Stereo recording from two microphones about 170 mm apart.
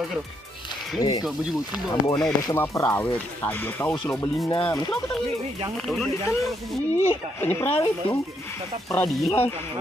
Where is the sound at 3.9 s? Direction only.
25° left (ahead or behind).